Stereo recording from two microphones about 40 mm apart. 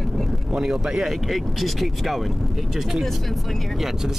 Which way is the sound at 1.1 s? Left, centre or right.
Centre.